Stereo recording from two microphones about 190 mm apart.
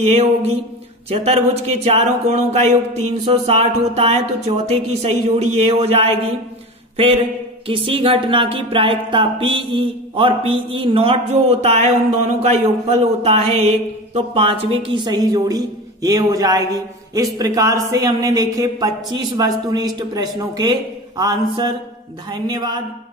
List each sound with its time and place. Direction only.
0.0 s speech: 35° right (ahead or behind)
7.6 s speech: 30° right (ahead or behind)